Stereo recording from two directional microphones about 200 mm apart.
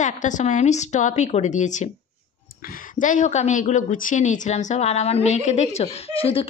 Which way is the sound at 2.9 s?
40° left (ahead or behind).